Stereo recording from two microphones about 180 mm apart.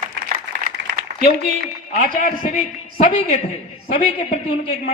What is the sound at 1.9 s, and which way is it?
A man's voice, 50° left (ahead or behind).